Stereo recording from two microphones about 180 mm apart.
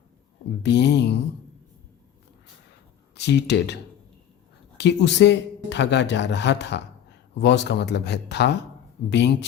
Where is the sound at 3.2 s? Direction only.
70° left (ahead or behind).